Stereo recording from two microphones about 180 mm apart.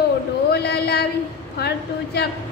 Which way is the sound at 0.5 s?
65° left (ahead or behind).